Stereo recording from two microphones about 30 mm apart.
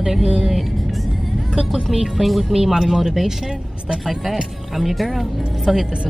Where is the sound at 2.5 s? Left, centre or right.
Centre.